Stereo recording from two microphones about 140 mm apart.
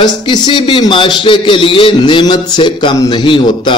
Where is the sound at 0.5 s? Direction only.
35° left (ahead or behind).